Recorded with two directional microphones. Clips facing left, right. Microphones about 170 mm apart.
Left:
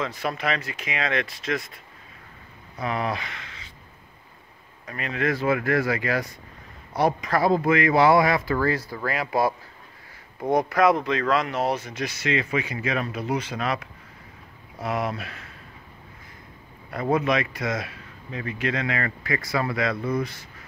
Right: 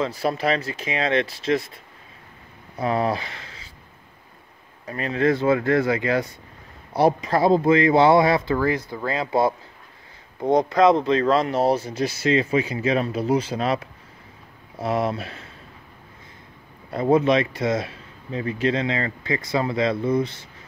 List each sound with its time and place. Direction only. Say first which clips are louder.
0.0 s speech: right 5 dB; 30° right (ahead or behind)
2.8 s speech: right 5 dB; 30° right (ahead or behind)
4.8 s speech: right 5 dB; 30° right (ahead or behind)
16.9 s speech: right 5 dB; 25° right (ahead or behind)